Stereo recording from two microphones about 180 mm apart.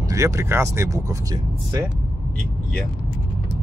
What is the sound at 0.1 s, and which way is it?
Speech, 15° right (ahead or behind).